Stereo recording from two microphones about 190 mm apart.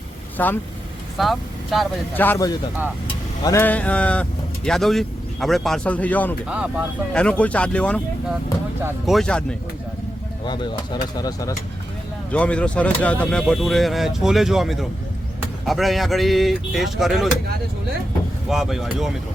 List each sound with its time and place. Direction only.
0.3 s speech: 10° left (ahead or behind)
6.5 s speech: 5° right (ahead or behind)
7.1 s speech: 5° left (ahead or behind)
9.0 s speech: centre (ahead or behind)
10.4 s speech: 25° left (ahead or behind)
12.3 s speech: 5° left (ahead or behind)
18.4 s speech: centre (ahead or behind)